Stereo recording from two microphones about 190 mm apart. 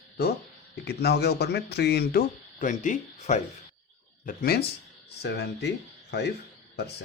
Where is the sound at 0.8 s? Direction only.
60° left (ahead or behind); by 3.4 s 40° left (ahead or behind).